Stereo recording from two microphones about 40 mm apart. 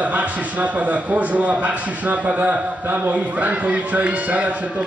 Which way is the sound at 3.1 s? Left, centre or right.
Right.